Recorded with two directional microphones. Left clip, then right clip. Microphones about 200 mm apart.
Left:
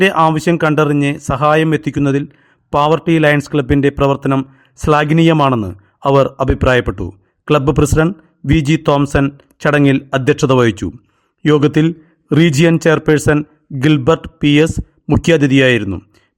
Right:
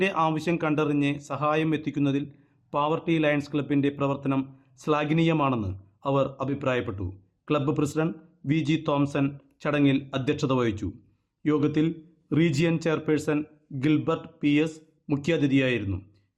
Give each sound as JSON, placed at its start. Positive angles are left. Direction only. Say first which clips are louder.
{"t": 0.0, "sound": "speech", "louder": "left 13 dB", "side_deg": 45}